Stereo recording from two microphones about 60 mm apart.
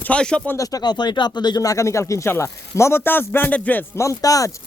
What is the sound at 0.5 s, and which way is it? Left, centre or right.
A man's voice, left.